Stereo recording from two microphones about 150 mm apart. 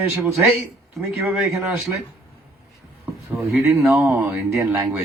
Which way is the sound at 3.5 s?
10° right (ahead or behind).